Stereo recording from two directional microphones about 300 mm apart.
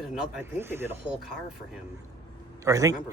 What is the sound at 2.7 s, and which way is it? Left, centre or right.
Speech, centre.